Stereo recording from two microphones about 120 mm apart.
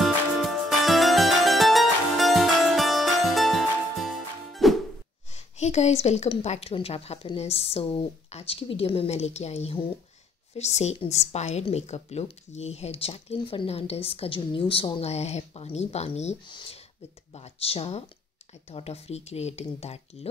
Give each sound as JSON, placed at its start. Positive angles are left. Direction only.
{"t": 0.0, "sound": "music", "side_deg": 0}
{"t": 5.3, "sound": "a sound", "side_deg": 70}
{"t": 6.4, "sound": "speech", "side_deg": 65}
{"t": 6.7, "sound": "speech", "side_deg": 55}
{"t": 16.4, "sound": "speech", "side_deg": 40}
{"t": 17.3, "sound": "speech", "side_deg": 55}